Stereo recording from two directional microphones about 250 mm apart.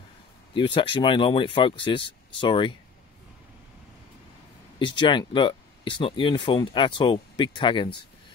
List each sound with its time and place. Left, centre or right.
0.6 s speech: centre
4.7 s speech: centre